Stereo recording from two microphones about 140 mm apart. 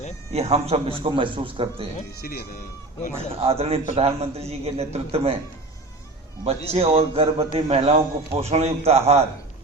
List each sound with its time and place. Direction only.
0.3 s a man's voice: 50° right (ahead or behind)
3.4 s a man's voice: 45° right (ahead or behind)
6.4 s a man's voice: 45° right (ahead or behind)